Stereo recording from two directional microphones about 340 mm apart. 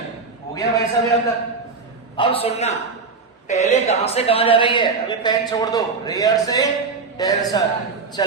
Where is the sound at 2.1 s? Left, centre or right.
Centre.